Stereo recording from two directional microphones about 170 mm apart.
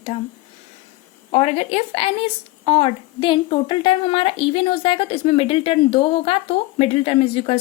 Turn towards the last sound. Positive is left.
turn(degrees=35)  # may be behind; listen again after turning